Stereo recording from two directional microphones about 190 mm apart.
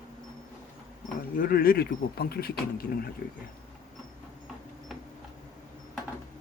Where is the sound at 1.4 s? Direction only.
50° left (ahead or behind).